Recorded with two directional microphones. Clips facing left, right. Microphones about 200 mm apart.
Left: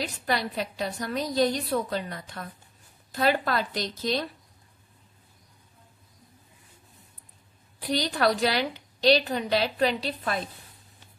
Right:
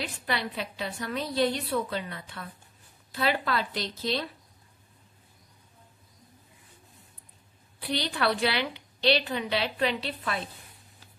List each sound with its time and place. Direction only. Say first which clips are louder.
0.0 s a woman's voice: left 3 dB; 40° left (ahead or behind)
7.8 s a woman's voice: left 4 dB; 40° left (ahead or behind)